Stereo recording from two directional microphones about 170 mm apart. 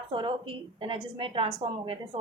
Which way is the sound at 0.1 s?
30° right (ahead or behind).